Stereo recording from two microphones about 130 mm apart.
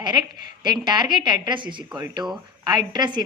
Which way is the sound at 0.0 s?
35° right (ahead or behind).